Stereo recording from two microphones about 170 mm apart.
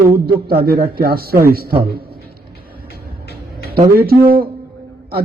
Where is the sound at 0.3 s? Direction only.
60° right (ahead or behind).